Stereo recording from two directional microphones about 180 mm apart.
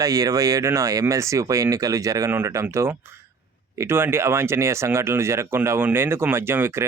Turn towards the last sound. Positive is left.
turn(degrees=-15)  # may be behind; listen again after turning